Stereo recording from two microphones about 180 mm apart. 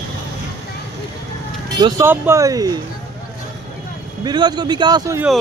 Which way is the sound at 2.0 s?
15° right (ahead or behind).